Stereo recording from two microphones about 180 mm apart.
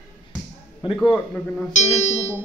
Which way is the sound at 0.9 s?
5° left (ahead or behind).